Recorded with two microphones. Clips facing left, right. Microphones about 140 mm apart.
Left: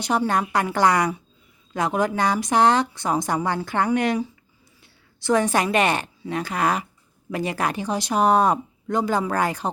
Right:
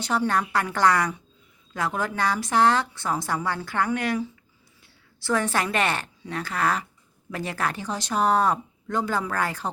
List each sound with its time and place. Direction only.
0.0 s a woman's voice: 15° left (ahead or behind)
5.2 s a woman's voice: 15° left (ahead or behind)